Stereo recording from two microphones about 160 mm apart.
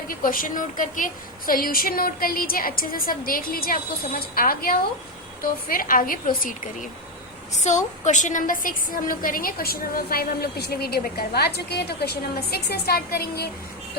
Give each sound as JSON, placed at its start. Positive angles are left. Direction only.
{"t": 0.1, "sound": "a woman's voice", "side_deg": 60}
{"t": 7.6, "sound": "a woman's voice", "side_deg": 45}